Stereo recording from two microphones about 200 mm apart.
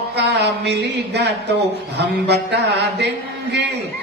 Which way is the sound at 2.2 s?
60° right (ahead or behind).